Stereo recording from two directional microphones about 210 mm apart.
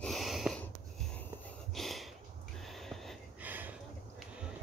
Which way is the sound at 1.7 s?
Centre (ahead or behind).